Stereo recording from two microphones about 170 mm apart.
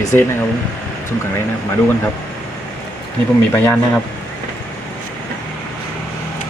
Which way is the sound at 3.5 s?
10° left (ahead or behind).